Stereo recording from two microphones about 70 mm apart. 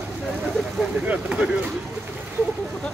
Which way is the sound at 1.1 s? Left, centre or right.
Centre.